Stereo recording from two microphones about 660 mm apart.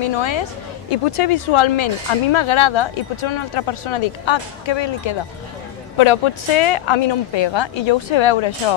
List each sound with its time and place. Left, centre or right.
0.0 s speech: left